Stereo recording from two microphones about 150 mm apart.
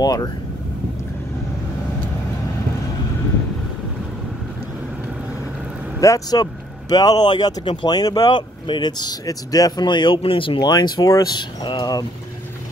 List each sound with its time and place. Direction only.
0.0 s speech: 25° left (ahead or behind)
5.9 s speech: 20° left (ahead or behind)